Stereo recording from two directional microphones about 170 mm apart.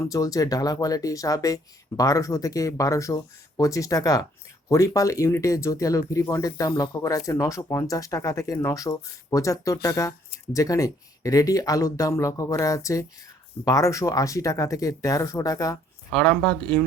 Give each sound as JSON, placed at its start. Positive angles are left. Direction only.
{"t": 0.0, "sound": "speech", "side_deg": 20}
{"t": 16.1, "sound": "speech", "side_deg": 5}